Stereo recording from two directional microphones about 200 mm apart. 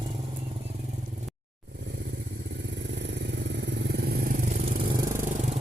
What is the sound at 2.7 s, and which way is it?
Vehicle, 60° right (ahead or behind).